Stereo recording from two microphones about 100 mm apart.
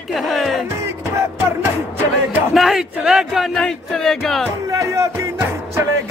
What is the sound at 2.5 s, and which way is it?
Speech, centre (ahead or behind).